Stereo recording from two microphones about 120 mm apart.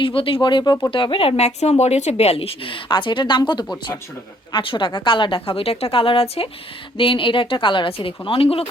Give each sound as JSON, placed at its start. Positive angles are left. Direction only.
{"t": 0.0, "sound": "speech", "side_deg": 50}